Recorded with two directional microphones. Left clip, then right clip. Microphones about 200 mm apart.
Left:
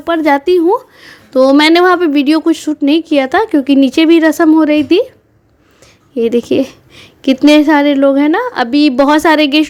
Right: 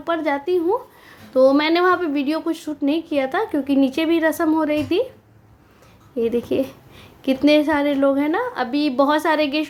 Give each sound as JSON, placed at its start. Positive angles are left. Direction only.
{"t": 0.0, "sound": "a woman's voice", "side_deg": 40}
{"t": 6.1, "sound": "a woman's voice", "side_deg": 40}